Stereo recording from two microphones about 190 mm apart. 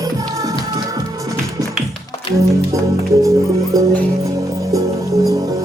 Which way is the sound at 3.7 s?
20° right (ahead or behind).